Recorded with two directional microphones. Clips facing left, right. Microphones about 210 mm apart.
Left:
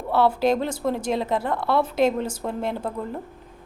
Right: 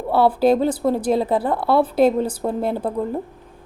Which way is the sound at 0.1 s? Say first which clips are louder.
Right 4 dB; 35° right (ahead or behind).